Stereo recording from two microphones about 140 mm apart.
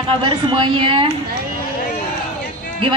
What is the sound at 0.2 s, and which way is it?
Speech, 35° right (ahead or behind).